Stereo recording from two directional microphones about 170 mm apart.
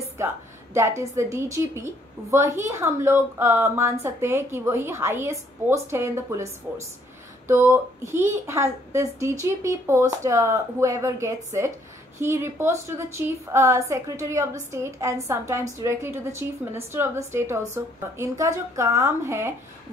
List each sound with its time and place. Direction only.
0.2 s a woman's voice: 15° right (ahead or behind)